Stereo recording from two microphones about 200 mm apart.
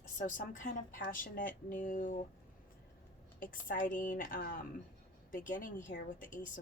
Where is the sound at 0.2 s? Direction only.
40° left (ahead or behind).